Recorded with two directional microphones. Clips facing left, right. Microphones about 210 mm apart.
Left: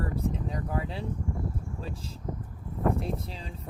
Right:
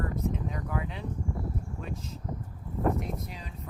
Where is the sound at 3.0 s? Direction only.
30° left (ahead or behind).